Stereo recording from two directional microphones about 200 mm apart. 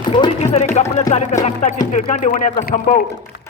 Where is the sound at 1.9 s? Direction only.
40° left (ahead or behind).